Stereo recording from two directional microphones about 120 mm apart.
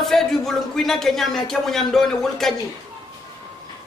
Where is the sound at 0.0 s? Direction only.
5° left (ahead or behind).